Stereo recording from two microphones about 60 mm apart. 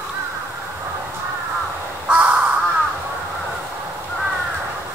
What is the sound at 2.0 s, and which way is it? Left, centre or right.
Crow, right.